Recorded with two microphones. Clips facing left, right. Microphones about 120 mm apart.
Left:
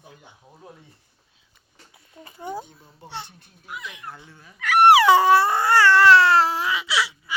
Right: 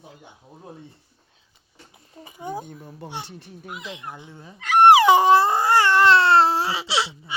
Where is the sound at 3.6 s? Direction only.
25° right (ahead or behind).